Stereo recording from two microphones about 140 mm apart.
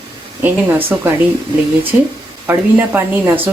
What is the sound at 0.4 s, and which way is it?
Speech, 15° right (ahead or behind).